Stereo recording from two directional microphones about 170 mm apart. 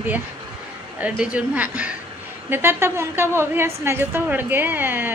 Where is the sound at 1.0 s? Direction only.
5° right (ahead or behind).